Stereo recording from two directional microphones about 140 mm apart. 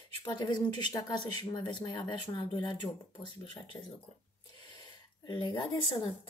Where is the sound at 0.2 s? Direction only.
30° left (ahead or behind).